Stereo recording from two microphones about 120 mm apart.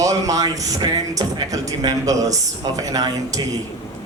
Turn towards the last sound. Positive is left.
turn(degrees=-30)  # may be behind; listen again after turning